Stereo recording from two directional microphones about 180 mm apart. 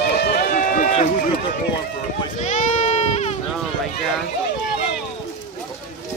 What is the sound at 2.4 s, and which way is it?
Sheep, 40° left (ahead or behind).